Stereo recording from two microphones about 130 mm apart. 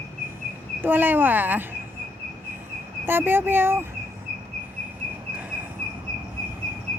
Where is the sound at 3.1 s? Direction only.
15° right (ahead or behind).